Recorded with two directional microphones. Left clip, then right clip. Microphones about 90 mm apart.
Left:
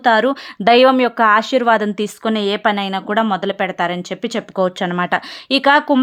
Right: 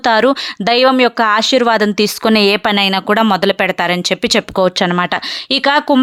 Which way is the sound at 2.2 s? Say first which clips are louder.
Right 7 dB; 90° right.